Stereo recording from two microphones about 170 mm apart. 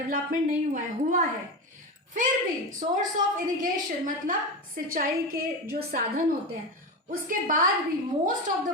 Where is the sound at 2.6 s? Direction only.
50° right (ahead or behind).